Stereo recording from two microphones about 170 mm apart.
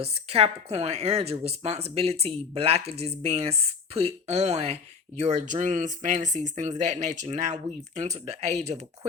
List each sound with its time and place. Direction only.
0.0 s speech: 35° right (ahead or behind)